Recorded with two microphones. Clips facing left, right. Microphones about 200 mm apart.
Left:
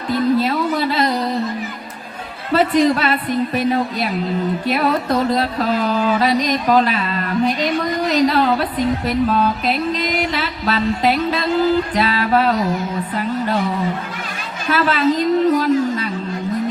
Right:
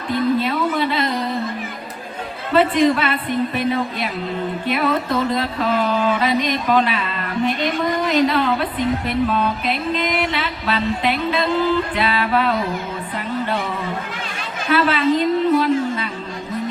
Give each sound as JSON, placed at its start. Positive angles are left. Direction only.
{"t": 0.1, "sound": "a sound", "side_deg": 40}
{"t": 2.5, "sound": "speech", "side_deg": 40}
{"t": 14.7, "sound": "speech", "side_deg": 40}
{"t": 15.4, "sound": "music", "side_deg": 40}